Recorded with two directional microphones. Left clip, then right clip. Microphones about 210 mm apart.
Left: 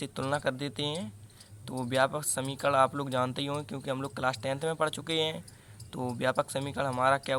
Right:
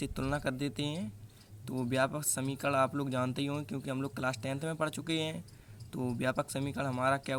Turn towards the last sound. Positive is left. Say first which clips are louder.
# left 5 dB
turn(degrees=-25)  # may be behind; listen again after turning